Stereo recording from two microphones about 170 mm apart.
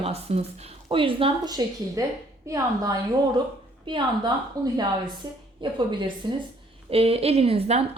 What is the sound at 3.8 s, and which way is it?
A woman's voice, 30° right (ahead or behind).